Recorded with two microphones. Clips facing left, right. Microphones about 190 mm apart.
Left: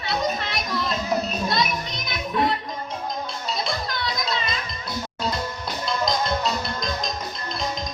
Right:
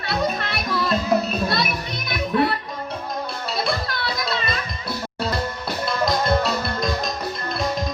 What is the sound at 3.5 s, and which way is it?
Children playing, 60° right (ahead or behind).